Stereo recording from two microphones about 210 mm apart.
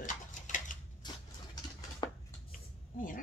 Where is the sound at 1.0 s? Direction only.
20° left (ahead or behind).